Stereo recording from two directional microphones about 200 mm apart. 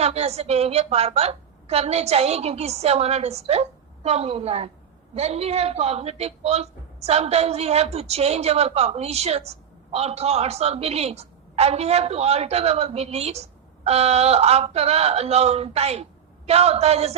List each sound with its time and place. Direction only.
0.0 s a woman's voice: 30° right (ahead or behind)